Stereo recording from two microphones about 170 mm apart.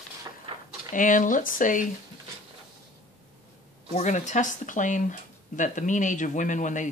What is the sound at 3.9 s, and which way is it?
Speech, 45° left (ahead or behind).